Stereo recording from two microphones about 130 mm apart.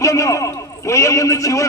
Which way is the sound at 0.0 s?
25° left (ahead or behind).